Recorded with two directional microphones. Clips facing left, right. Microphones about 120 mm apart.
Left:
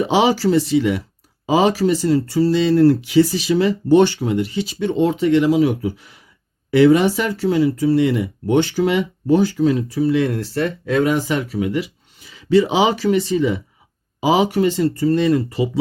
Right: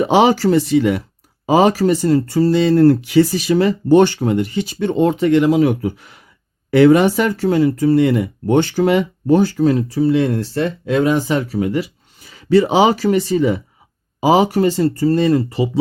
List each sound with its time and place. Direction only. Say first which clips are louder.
0.0 s speech: right 3 dB; 50° right (ahead or behind)
9.9 s speech: right 2 dB; 30° right (ahead or behind)